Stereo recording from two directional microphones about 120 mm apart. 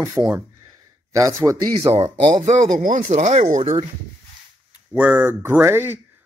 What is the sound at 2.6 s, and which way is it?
Speech, 90° right.